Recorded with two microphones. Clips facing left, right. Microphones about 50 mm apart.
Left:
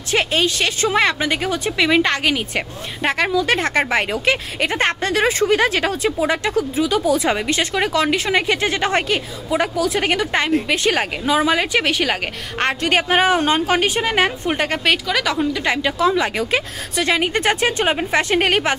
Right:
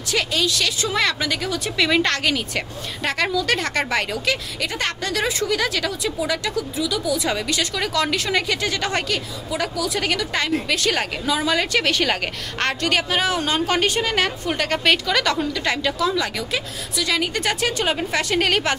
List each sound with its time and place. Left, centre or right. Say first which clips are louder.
0.1 s a woman's voice: left 4 dB; left
1.8 s a woman's voice: left 2 dB; centre
13.1 s a woman's voice: left 6 dB; left
13.7 s a woman's voice: left 2 dB; centre
14.7 s a woman's voice: even; centre
15.6 s a woman's voice: left 4 dB; centre
16.4 s a woman's voice: left 5 dB; left